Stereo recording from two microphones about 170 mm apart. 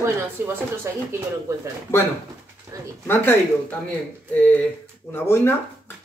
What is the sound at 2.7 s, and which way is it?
Speech, 20° right (ahead or behind).